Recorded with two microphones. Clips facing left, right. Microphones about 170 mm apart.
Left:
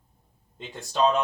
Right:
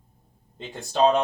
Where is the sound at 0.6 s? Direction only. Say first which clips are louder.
Right 3 dB; 50° right (ahead or behind).